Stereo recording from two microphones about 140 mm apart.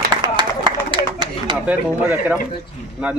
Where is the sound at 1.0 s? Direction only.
30° right (ahead or behind).